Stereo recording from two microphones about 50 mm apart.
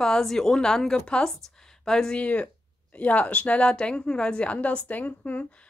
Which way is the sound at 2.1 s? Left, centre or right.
Left.